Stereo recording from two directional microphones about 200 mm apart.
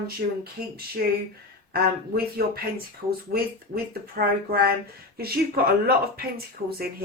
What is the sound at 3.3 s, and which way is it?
Speech, 50° right (ahead or behind).